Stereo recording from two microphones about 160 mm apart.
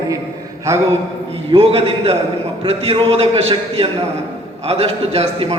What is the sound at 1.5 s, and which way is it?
A man's voice, 35° right (ahead or behind).